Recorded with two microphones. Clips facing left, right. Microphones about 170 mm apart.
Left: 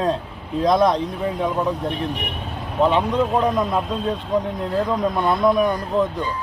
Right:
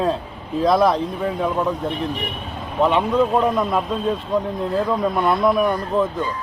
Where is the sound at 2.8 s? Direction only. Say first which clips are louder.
Right 1 dB; centre (ahead or behind).